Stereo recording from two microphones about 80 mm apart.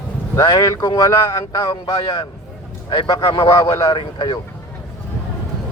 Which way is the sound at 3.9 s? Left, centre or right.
Left.